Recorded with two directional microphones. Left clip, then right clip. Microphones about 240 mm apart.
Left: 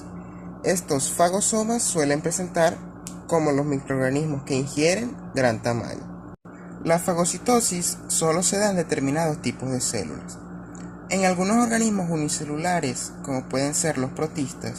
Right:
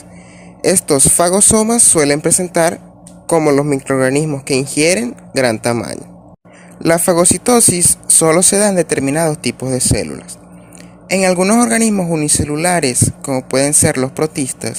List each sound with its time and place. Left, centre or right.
0.6 s a man's voice: right